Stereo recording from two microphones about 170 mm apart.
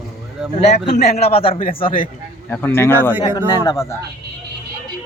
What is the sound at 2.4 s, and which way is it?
Speech, 10° left (ahead or behind).